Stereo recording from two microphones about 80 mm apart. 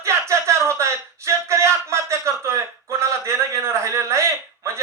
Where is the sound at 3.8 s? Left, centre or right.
Right.